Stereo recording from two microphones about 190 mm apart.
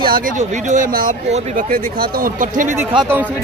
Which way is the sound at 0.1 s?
40° right (ahead or behind).